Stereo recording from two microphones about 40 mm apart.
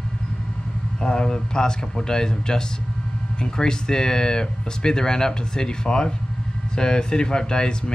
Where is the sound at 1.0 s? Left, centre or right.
Centre.